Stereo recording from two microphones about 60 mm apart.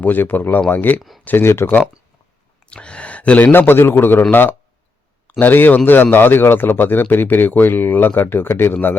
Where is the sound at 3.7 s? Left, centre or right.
Left.